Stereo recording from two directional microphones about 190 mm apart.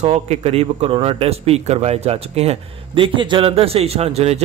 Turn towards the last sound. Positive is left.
turn(degrees=-35)  # may be behind; listen again after turning